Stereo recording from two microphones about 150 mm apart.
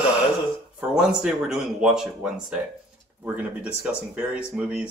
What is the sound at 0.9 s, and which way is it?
Speech, 5° right (ahead or behind).